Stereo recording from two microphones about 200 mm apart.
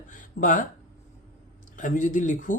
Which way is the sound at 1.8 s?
40° left (ahead or behind).